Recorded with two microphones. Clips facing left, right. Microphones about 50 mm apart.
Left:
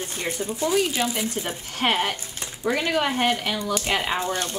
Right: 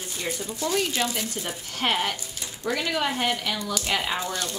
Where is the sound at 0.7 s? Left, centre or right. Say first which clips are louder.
Left 3 dB; centre.